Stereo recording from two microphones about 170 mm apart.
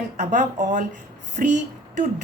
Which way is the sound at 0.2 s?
45° right (ahead or behind).